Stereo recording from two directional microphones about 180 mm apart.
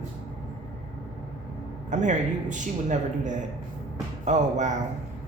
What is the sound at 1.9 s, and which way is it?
A man's voice, 45° right (ahead or behind).